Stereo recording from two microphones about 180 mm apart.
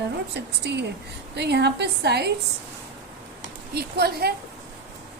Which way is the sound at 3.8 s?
60° right (ahead or behind).